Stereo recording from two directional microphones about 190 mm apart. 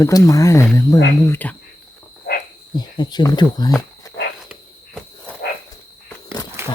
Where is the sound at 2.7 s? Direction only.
20° left (ahead or behind).